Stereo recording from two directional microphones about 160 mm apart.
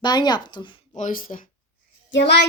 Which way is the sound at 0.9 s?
55° left (ahead or behind).